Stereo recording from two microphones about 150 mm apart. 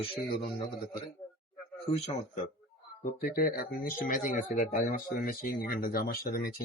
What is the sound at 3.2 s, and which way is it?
Speech, 75° left (ahead or behind).